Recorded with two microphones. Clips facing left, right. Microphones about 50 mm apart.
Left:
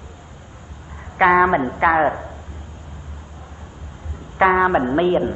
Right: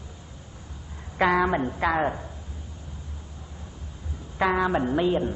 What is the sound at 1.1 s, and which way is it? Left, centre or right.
A man's voice, left.